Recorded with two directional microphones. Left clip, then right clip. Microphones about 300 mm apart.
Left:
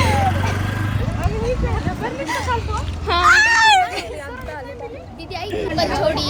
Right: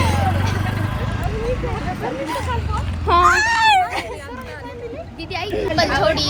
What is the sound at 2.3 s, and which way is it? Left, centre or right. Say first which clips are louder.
Speech: left 2 dB; centre.